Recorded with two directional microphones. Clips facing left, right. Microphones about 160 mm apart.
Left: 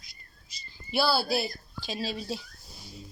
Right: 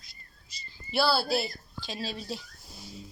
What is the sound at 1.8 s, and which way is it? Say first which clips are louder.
Speech: left 3 dB; 20° right (ahead or behind).